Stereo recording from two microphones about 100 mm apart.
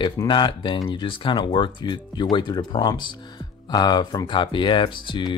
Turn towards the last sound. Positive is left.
turn(degrees=50)  # may be behind; listen again after turning